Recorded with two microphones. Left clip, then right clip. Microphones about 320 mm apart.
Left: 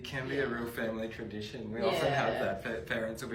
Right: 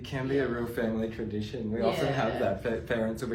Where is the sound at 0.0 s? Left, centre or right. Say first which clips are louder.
Right 4 dB; centre.